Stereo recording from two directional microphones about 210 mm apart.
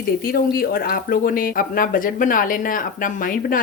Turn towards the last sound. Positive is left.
turn(degrees=40)  # may be behind; listen again after turning